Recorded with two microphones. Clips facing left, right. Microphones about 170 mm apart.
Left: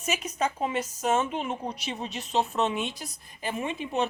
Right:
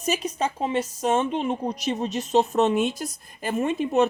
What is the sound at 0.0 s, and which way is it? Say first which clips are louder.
A woman's voice: right 4 dB; 35° right (ahead or behind).